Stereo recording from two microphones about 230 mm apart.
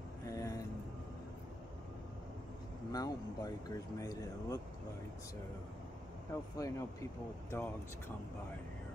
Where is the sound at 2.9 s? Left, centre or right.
Centre.